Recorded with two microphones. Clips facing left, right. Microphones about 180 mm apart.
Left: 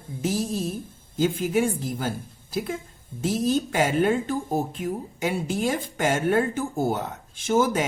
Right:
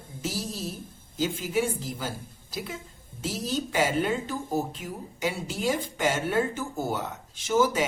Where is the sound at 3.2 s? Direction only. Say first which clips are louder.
Left 7 dB; 50° left (ahead or behind).